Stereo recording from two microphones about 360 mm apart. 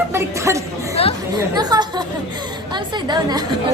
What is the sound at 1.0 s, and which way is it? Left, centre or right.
Chatter, centre.